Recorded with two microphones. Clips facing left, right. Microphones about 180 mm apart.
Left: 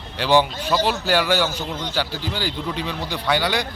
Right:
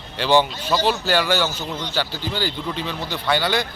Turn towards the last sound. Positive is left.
turn(degrees=10)  # may be behind; listen again after turning